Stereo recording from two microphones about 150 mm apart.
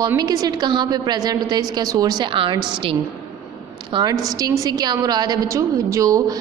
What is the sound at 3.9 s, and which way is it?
A woman's voice, 35° right (ahead or behind).